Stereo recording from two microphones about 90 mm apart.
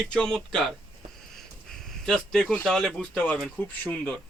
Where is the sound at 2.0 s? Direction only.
5° left (ahead or behind).